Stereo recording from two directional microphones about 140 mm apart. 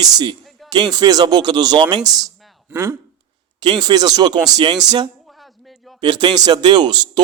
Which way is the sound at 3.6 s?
35° right (ahead or behind).